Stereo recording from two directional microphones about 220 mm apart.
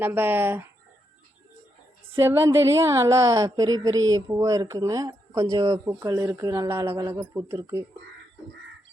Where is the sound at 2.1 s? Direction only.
10° right (ahead or behind).